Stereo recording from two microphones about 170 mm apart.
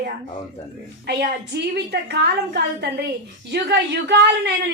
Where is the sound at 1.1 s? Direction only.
70° right (ahead or behind).